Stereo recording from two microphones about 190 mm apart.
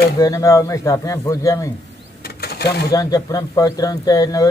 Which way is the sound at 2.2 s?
55° left (ahead or behind).